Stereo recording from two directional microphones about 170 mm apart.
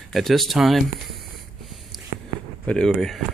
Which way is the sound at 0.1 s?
Centre (ahead or behind).